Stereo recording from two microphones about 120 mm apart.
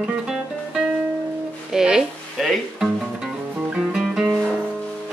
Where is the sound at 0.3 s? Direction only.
5° right (ahead or behind).